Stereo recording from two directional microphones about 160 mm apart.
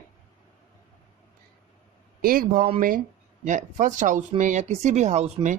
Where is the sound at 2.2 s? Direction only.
65° right (ahead or behind).